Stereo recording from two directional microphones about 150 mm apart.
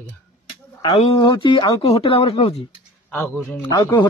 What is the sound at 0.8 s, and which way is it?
Speech, 40° left (ahead or behind).